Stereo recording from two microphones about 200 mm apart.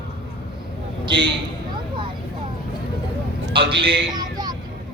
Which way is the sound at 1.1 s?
25° right (ahead or behind).